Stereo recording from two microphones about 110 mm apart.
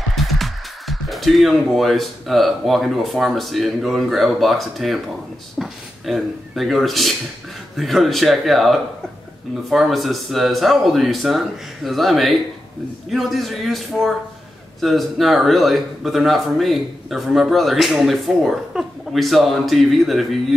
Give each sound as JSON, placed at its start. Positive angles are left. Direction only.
{"t": 0.1, "sound": "speech", "side_deg": 0}